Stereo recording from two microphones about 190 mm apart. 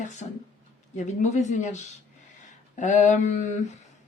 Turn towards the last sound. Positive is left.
turn(degrees=40)  # may be behind; listen again after turning